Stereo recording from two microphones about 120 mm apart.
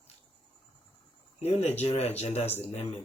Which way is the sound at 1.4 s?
65° left (ahead or behind).